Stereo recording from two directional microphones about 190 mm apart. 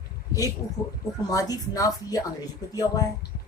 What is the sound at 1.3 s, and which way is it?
Speech, 20° left (ahead or behind).